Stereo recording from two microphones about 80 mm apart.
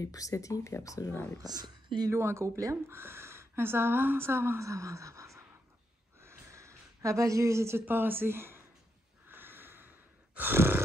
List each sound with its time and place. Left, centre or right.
0.0 s speech: left
1.1 s speech: left
1.4 s speech: right
2.0 s speech: right
6.2 s a sound: right
7.8 s speech: right
9.3 s sigh: right